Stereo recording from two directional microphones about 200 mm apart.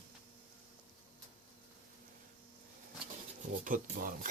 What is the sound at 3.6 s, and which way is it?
Speech, 40° right (ahead or behind).